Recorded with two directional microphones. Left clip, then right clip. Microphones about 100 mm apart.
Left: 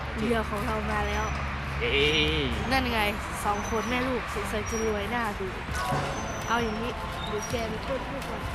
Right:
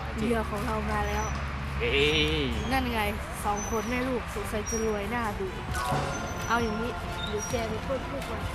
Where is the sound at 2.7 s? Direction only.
15° left (ahead or behind).